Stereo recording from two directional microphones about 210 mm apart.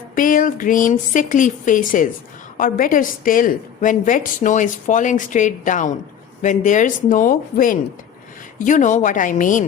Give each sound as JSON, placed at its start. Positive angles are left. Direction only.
{"t": 0.2, "sound": "a woman's voice", "side_deg": 40}